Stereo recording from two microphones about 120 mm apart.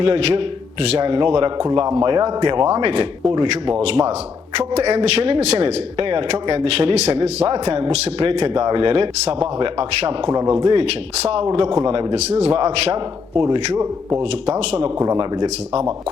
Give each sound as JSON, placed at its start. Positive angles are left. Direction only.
{"t": 0.0, "sound": "speech", "side_deg": -50}
{"t": 3.8, "sound": "a man's voice", "side_deg": -60}
{"t": 8.6, "sound": "speech", "side_deg": -40}
{"t": 10.2, "sound": "speech", "side_deg": -30}
{"t": 10.5, "sound": "speech", "side_deg": -45}
{"t": 12.1, "sound": "a man's voice", "side_deg": -65}
{"t": 12.5, "sound": "speech", "side_deg": -55}
{"t": 15.0, "sound": "speech", "side_deg": -40}